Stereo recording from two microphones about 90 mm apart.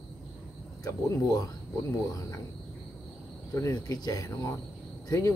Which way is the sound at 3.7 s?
45° left (ahead or behind).